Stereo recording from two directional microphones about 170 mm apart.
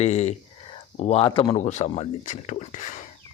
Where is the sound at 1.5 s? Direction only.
40° left (ahead or behind).